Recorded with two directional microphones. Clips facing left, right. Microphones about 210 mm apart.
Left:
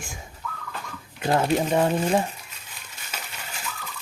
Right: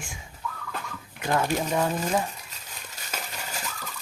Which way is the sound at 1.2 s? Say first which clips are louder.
Left 4 dB; 30° left (ahead or behind).